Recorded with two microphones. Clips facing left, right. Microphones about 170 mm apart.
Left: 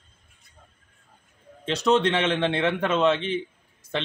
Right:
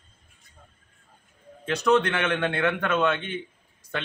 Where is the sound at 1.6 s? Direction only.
25° left (ahead or behind).